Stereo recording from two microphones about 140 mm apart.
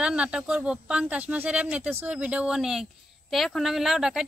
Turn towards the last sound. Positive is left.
turn(degrees=-5)  # may be behind; listen again after turning